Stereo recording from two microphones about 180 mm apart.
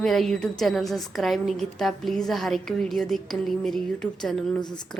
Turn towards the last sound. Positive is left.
turn(degrees=5)  # may be behind; listen again after turning